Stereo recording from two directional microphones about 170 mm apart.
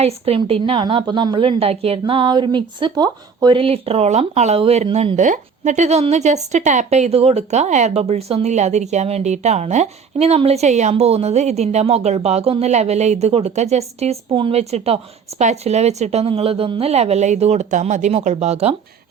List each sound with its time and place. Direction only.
0.0 s a woman's voice: 35° right (ahead or behind)
5.1 s a woman's voice: 45° right (ahead or behind)